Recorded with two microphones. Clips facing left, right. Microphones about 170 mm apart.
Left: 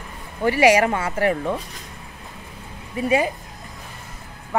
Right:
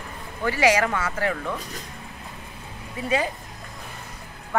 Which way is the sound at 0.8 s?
30° left (ahead or behind).